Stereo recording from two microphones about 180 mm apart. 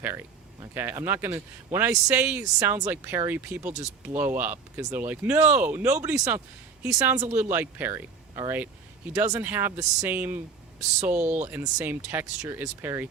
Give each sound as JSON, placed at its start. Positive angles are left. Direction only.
{"t": 0.7, "sound": "speech", "side_deg": -10}
{"t": 3.6, "sound": "speech", "side_deg": -40}
{"t": 4.0, "sound": "speech", "side_deg": -10}
{"t": 10.8, "sound": "speech", "side_deg": -40}
{"t": 11.4, "sound": "speech", "side_deg": -15}